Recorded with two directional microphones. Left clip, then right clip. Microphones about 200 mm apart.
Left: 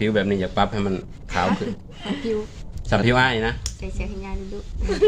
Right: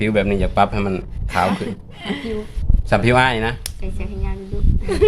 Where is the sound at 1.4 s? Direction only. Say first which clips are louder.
Right 3 dB; 55° right (ahead or behind).